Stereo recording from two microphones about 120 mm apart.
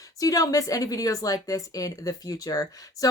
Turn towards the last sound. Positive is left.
turn(degrees=30)  # may be behind; listen again after turning